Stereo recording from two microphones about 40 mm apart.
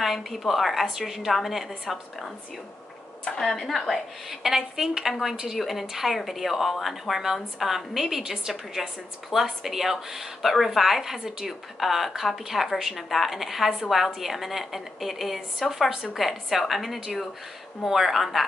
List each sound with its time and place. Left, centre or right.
0.0 s a woman's voice: centre
3.3 s a woman's voice: centre
5.6 s a woman's voice: centre
15.9 s a woman's voice: centre
16.2 s a woman's voice: centre